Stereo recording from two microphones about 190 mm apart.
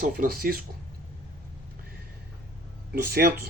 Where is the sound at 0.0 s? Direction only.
50° right (ahead or behind).